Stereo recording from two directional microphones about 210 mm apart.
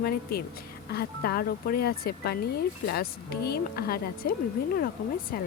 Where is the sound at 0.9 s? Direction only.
45° left (ahead or behind).